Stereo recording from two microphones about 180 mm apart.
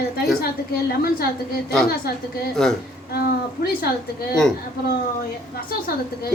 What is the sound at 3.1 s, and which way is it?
Speech, 60° left (ahead or behind).